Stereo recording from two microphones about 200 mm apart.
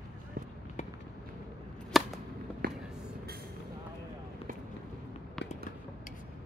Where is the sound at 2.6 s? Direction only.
55° right (ahead or behind).